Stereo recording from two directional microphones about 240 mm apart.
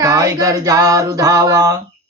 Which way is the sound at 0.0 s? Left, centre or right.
Centre.